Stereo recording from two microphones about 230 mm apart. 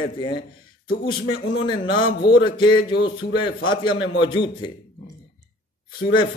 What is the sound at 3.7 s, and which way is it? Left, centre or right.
A man's voice, left.